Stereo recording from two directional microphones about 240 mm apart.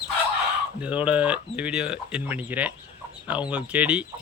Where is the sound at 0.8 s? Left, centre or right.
Centre.